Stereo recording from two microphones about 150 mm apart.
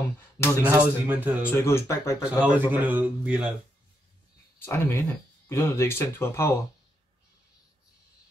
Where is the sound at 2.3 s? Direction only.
10° right (ahead or behind).